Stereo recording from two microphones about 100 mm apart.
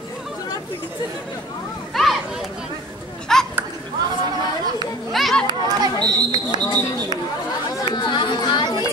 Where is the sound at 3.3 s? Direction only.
5° left (ahead or behind).